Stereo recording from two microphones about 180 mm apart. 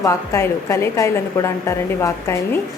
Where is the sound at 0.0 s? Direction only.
15° left (ahead or behind).